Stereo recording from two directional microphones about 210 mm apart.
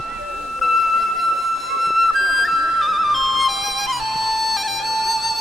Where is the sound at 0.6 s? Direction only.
Centre (ahead or behind).